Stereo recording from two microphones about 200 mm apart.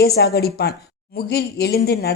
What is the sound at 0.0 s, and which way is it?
A woman's voice, 50° left (ahead or behind).